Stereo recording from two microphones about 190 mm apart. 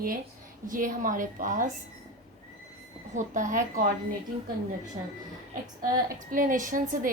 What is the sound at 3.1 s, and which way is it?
Speech, 40° right (ahead or behind).